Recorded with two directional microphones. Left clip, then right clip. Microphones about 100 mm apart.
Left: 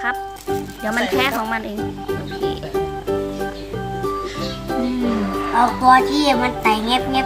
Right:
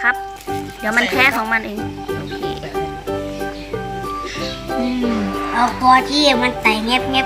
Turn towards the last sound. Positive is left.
turn(degrees=15)  # may be behind; listen again after turning